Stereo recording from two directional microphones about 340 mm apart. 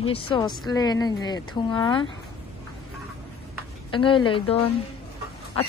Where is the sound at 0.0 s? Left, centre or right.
Centre.